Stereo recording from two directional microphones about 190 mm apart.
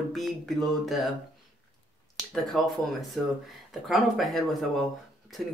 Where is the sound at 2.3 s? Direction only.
Centre (ahead or behind).